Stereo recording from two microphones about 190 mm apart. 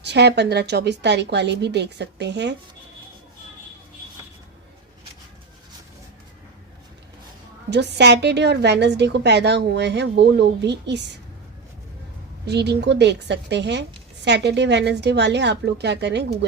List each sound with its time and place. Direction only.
0.0 s a woman's voice: 60° right (ahead or behind)
7.7 s a woman's voice: 60° right (ahead or behind)
12.5 s a woman's voice: 60° right (ahead or behind)